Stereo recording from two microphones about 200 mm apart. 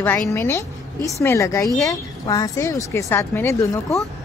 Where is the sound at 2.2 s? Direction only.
15° left (ahead or behind).